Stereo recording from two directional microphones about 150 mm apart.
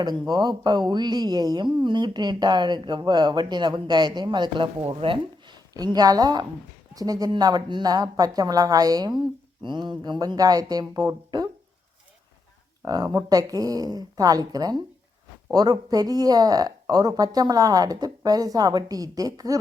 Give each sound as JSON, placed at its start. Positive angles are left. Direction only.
{"t": 0.0, "sound": "speech", "side_deg": -30}
{"t": 12.8, "sound": "speech", "side_deg": -25}